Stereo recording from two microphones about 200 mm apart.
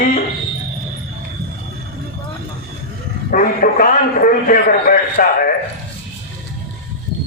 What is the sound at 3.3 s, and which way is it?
A man's voice, 45° left (ahead or behind).